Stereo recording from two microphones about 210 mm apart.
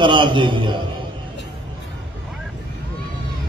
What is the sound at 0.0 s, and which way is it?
Speech, 25° right (ahead or behind).